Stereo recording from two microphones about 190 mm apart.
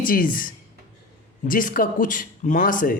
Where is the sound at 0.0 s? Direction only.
45° left (ahead or behind).